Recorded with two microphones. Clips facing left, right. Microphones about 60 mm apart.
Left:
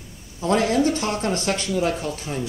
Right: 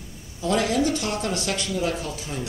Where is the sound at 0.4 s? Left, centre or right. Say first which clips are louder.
Left 3 dB; left.